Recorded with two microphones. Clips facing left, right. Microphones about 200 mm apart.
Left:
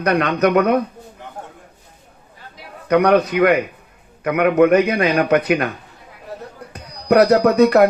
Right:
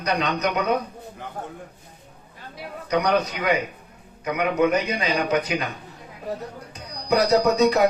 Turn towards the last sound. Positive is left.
turn(degrees=55)  # may be behind; listen again after turning